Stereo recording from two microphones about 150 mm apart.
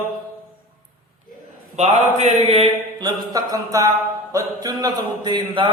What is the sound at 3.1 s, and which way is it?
A man's voice, 25° right (ahead or behind).